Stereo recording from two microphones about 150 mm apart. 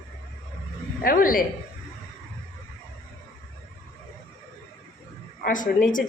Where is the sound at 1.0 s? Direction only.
70° left (ahead or behind).